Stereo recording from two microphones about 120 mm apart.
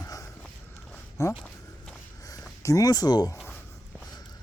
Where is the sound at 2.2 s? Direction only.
30° left (ahead or behind).